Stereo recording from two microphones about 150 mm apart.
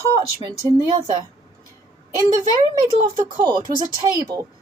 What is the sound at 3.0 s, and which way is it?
Speech, 30° right (ahead or behind).